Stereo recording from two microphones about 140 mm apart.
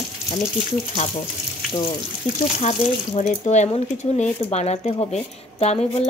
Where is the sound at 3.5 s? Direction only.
55° left (ahead or behind).